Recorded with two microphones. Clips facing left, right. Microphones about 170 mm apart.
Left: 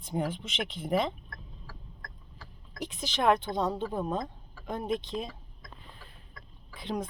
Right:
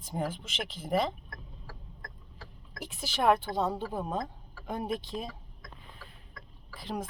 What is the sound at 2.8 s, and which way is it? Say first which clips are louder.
A woman's voice: even; 10° right (ahead or behind).